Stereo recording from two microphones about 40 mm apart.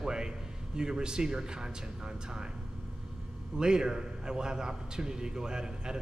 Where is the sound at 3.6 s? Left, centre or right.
Centre.